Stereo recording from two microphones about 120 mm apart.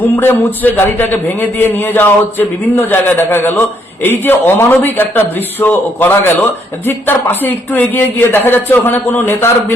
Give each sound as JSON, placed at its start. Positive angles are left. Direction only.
{"t": 0.0, "sound": "a man's voice", "side_deg": 15}